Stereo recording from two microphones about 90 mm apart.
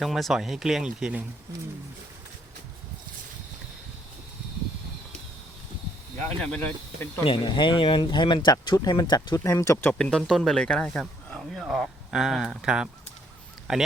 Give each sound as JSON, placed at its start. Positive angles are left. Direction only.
{"t": 0.0, "sound": "speech", "side_deg": 0}
{"t": 6.4, "sound": "speech", "side_deg": 10}
{"t": 7.3, "sound": "speech", "side_deg": 60}
{"t": 9.4, "sound": "speech", "side_deg": 35}
{"t": 10.0, "sound": "speech", "side_deg": 5}